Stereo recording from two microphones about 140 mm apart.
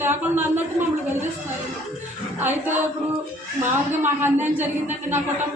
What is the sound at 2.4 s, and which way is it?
Speech, 15° right (ahead or behind).